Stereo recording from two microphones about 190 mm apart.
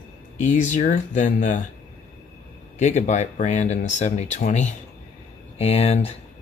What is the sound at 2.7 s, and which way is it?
Speech, 40° left (ahead or behind).